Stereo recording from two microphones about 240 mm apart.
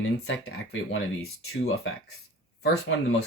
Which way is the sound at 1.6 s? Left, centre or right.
Left.